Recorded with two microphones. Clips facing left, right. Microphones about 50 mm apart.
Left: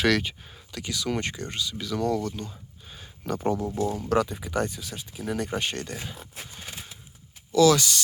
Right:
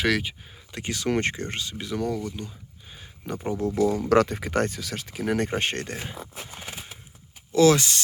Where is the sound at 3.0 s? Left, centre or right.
Centre.